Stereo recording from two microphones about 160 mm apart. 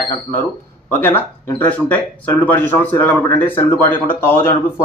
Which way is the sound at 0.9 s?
10° left (ahead or behind).